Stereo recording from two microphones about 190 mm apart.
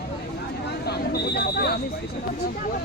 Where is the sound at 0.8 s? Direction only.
55° left (ahead or behind).